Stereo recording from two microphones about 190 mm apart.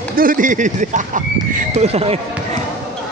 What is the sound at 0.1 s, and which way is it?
Speech, 45° right (ahead or behind).